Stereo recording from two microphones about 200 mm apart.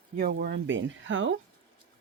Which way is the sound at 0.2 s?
50° right (ahead or behind).